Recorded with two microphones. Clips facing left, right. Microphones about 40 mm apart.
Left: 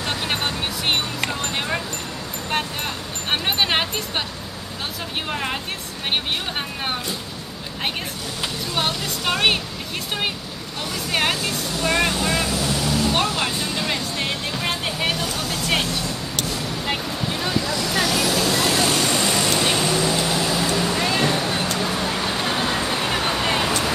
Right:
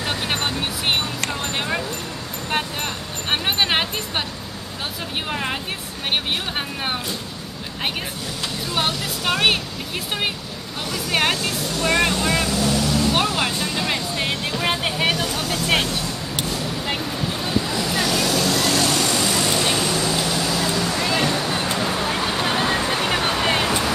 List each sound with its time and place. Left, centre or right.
0.0 s music: centre
1.3 s a sound: centre
3.3 s music: centre
5.3 s speech: centre
8.7 s speech: centre
10.9 s speech: centre
13.1 s music: centre
15.2 s vehicle: centre
16.5 s vehicle: centre
17.6 s vehicle: centre
17.9 s vehicle: centre